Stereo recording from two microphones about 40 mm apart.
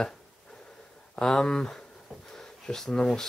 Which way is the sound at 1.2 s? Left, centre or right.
Centre.